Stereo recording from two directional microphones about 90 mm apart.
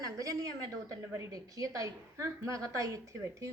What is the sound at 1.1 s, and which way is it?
A woman's voice, 35° right (ahead or behind).